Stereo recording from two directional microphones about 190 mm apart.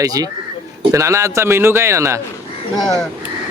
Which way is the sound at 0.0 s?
20° right (ahead or behind).